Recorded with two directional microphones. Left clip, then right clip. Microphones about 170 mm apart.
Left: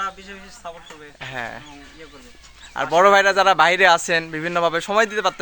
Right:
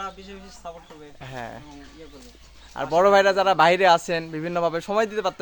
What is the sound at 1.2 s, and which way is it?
Speech, 20° left (ahead or behind).